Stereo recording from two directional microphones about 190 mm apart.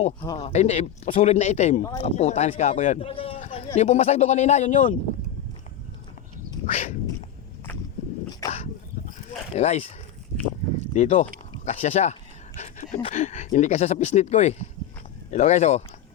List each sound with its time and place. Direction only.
0.3 s speech: 35° left (ahead or behind)
1.8 s speech: 20° left (ahead or behind)
2.0 s speech: 35° left (ahead or behind)
6.7 s speech: 35° left (ahead or behind)
8.3 s dog: 20° left (ahead or behind)
9.6 s speech: 35° left (ahead or behind)
10.9 s speech: 35° left (ahead or behind)